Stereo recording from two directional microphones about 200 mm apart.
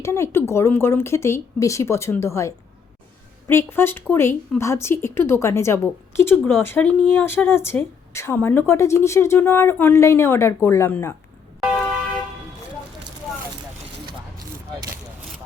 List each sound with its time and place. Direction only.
0.0 s a woman's voice: 15° left (ahead or behind)